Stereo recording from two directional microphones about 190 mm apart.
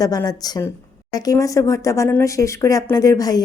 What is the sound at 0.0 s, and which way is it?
A woman's voice, 20° left (ahead or behind).